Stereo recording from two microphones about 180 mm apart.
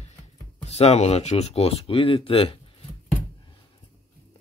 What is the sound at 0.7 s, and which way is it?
Speech, 35° left (ahead or behind).